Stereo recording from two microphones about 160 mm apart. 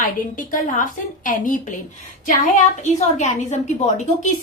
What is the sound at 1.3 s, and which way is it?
Speech, 55° left (ahead or behind).